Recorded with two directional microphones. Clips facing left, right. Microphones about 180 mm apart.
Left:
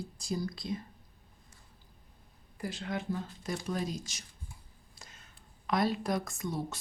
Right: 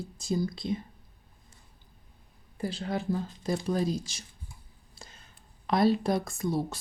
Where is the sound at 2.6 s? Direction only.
30° right (ahead or behind).